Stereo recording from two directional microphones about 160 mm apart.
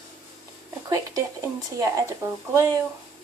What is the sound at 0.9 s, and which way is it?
Speech, 20° right (ahead or behind).